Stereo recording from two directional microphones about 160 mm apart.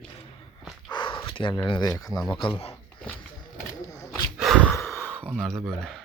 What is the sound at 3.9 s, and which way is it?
Wild animals, 25° left (ahead or behind).